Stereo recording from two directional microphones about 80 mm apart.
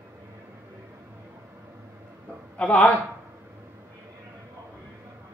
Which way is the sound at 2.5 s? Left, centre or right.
Centre.